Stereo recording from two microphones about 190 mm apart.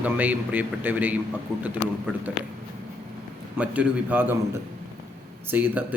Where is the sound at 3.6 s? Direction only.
10° right (ahead or behind).